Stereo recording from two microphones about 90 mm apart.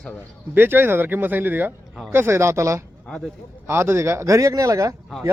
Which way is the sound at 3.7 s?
30° right (ahead or behind).